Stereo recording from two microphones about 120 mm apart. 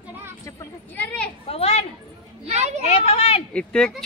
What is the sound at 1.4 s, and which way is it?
Children playing, 55° left (ahead or behind).